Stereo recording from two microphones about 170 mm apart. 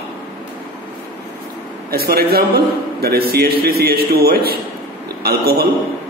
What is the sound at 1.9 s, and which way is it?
A man's voice, 65° right (ahead or behind).